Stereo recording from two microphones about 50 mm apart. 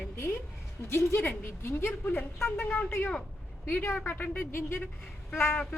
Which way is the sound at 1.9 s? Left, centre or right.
Left.